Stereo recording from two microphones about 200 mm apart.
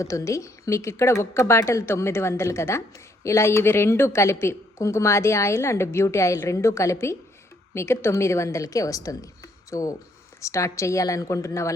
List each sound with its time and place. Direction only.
0.0 s a woman's voice: 15° left (ahead or behind)